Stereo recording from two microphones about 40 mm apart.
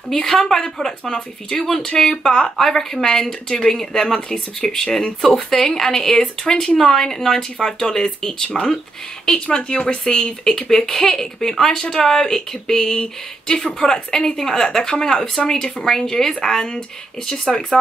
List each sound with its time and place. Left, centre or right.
0.1 s speech: centre
9.2 s speech: left